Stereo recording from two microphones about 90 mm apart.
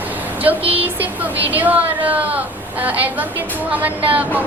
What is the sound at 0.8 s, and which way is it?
A woman's voice, 20° right (ahead or behind).